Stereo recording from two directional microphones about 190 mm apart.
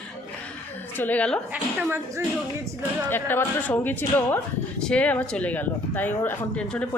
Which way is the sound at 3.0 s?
10° left (ahead or behind).